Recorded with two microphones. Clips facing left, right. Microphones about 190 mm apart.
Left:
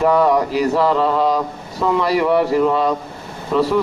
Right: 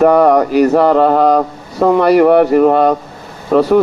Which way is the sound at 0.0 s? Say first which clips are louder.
Right 6 dB; 60° right (ahead or behind).